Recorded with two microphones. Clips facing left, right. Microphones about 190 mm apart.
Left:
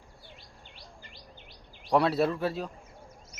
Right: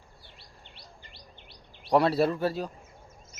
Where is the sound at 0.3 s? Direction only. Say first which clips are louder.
Left 1 dB; 70° right (ahead or behind).